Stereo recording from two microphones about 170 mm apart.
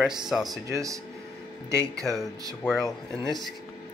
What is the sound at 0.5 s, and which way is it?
Speech, 20° right (ahead or behind).